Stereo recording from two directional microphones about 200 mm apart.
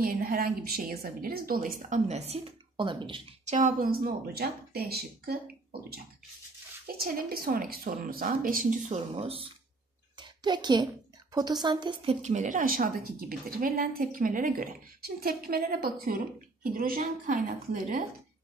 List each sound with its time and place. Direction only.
0.0 s a woman's voice: 45° right (ahead or behind)
7.0 s a woman's voice: 50° right (ahead or behind)